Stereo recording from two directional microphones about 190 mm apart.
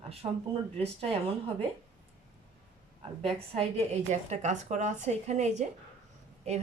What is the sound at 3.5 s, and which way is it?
A woman's voice, 35° right (ahead or behind).